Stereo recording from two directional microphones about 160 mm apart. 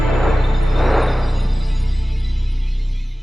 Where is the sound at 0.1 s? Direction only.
Centre (ahead or behind).